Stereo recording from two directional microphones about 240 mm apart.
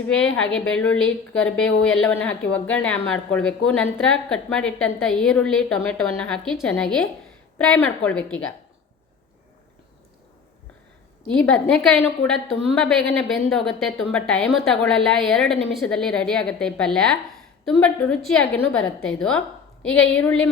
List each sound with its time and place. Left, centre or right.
0.1 s a woman's voice: left
0.5 s a woman's voice: centre
11.3 s a woman's voice: centre
20.1 s a woman's voice: centre